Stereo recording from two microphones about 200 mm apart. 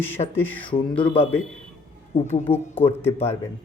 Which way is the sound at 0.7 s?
25° left (ahead or behind).